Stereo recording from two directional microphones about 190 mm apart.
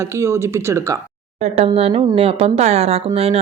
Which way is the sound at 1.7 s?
30° right (ahead or behind).